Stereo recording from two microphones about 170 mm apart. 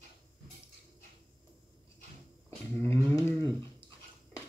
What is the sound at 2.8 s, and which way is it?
Speech, 15° left (ahead or behind).